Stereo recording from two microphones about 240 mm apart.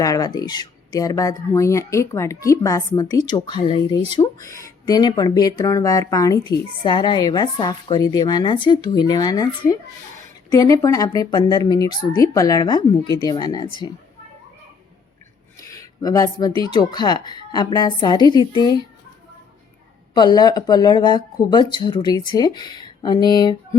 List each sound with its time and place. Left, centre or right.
0.0 s speech: centre
15.6 s a sound: centre
16.6 s speech: centre
20.1 s speech: centre